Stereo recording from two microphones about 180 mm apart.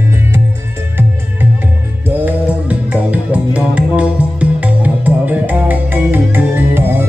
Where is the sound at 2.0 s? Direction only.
10° right (ahead or behind).